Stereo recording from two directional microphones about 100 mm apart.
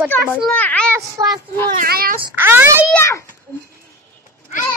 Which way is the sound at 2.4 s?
20° right (ahead or behind).